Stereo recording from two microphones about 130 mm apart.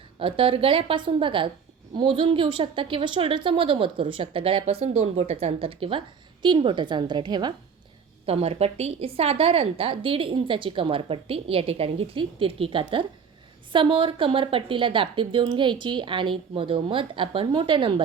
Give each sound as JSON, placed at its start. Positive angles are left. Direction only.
{"t": 0.2, "sound": "a woman's voice", "side_deg": -45}
{"t": 8.3, "sound": "a woman's voice", "side_deg": -50}